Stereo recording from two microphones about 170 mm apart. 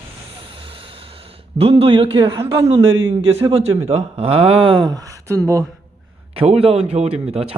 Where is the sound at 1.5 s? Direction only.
35° right (ahead or behind).